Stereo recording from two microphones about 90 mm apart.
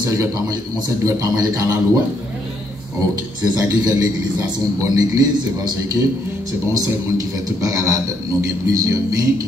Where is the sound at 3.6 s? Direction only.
45° right (ahead or behind).